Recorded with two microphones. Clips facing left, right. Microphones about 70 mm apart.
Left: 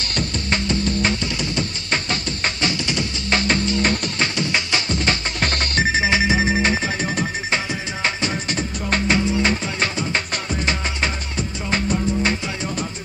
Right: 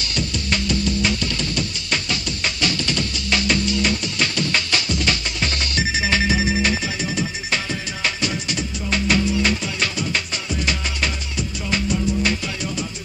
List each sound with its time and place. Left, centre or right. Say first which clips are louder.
0.0 s music: left 1 dB; left
4.4 s music: even; left
4.9 s music: left 2 dB; left
5.4 s music: left 3 dB; left
6.0 s music: left 2 dB; left